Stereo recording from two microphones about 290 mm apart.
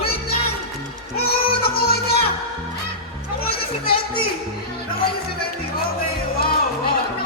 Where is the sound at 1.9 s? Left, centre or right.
Left.